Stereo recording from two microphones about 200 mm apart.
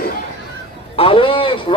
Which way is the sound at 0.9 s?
25° left (ahead or behind).